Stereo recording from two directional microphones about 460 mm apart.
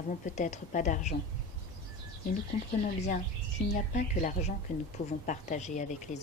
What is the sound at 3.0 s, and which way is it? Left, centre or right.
A woman's voice, centre.